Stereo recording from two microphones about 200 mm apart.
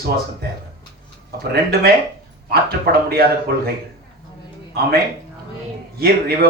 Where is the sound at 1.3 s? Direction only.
50° right (ahead or behind).